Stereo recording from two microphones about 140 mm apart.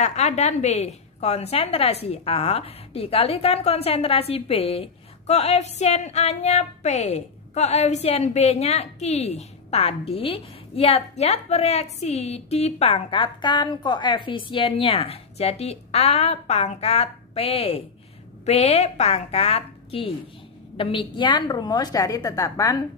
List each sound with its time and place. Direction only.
0.0 s a woman's voice: 55° left (ahead or behind); by 22.8 s 25° left (ahead or behind)